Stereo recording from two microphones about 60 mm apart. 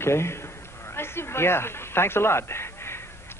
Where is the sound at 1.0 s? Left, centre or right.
Left.